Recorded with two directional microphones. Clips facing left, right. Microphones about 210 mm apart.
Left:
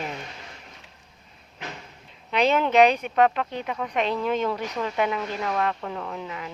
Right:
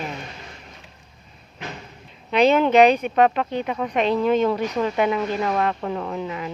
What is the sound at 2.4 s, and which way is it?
Speech, 35° right (ahead or behind).